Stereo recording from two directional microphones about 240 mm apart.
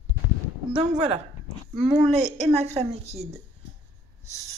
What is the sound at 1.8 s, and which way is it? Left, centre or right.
A woman's voice, right.